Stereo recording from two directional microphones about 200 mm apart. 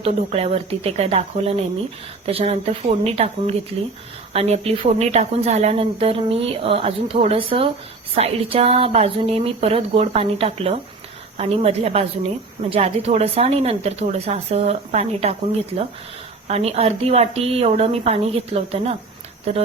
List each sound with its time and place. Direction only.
0.0 s speech: 30° right (ahead or behind)
16.5 s speech: 30° right (ahead or behind)